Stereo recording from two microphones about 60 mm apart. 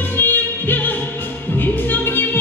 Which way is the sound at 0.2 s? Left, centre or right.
Left.